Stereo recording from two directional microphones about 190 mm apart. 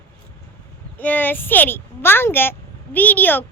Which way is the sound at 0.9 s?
10° left (ahead or behind).